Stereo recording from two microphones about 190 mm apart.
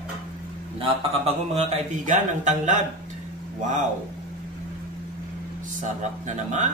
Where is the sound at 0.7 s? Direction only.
30° right (ahead or behind).